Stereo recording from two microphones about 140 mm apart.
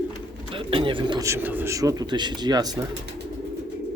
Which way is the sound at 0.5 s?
40° right (ahead or behind).